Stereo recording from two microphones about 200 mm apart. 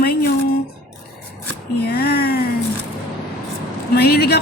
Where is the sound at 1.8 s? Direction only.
55° left (ahead or behind).